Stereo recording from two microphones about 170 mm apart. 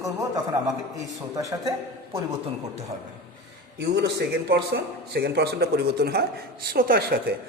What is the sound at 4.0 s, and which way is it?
A man's voice, 75° right (ahead or behind).